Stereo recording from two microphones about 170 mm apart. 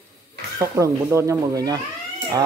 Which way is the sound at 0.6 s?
20° right (ahead or behind).